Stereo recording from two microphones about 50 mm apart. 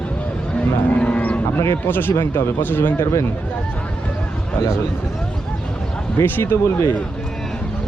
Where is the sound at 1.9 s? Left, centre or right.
Left.